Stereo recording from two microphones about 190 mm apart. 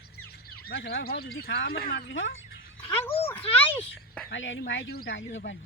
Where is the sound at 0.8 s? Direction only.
55° left (ahead or behind).